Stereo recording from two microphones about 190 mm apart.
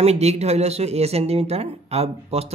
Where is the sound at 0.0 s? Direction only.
35° right (ahead or behind).